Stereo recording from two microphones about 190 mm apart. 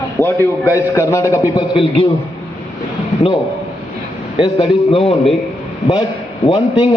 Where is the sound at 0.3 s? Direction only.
15° left (ahead or behind).